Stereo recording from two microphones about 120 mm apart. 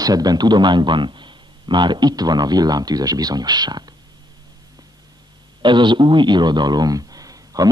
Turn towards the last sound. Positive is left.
turn(degrees=-30)  # may be behind; listen again after turning